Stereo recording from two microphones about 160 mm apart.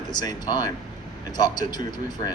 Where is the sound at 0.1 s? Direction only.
25° left (ahead or behind).